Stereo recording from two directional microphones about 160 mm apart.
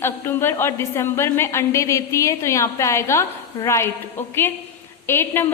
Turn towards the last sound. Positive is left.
turn(degrees=15)  # may be behind; listen again after turning